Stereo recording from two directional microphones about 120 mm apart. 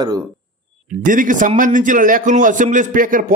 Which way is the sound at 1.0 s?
90° right.